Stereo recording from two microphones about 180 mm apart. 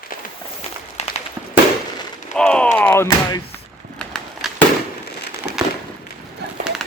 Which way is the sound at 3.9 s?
5° left (ahead or behind).